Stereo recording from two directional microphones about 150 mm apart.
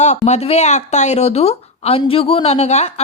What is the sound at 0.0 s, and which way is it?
Speech, 50° left (ahead or behind).